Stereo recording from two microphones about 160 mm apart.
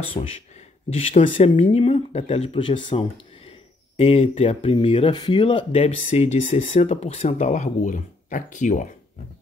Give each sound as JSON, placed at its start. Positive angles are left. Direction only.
{"t": 0.2, "sound": "speech", "side_deg": 25}
{"t": 0.8, "sound": "speech", "side_deg": 40}